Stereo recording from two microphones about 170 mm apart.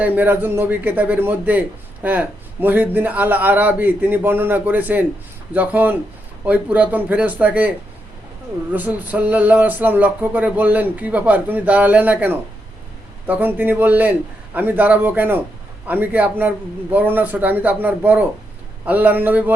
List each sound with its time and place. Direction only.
0.0 s a man's voice: 10° right (ahead or behind)
8.7 s a man's voice: 10° right (ahead or behind)